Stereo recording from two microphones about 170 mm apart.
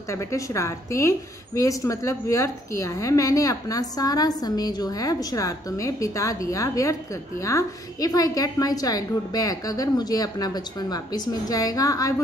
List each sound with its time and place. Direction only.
0.1 s a woman's voice: 15° left (ahead or behind)